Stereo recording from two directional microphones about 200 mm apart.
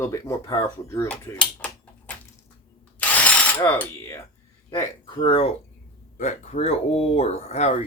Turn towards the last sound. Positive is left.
turn(degrees=35)  # may be behind; listen again after turning